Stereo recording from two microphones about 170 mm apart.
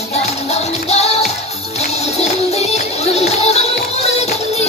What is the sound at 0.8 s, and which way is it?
Music, 40° left (ahead or behind).